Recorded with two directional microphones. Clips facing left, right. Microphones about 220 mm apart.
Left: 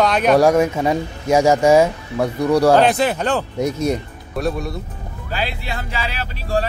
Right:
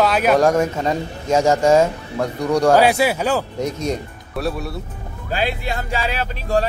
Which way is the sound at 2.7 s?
10° right (ahead or behind).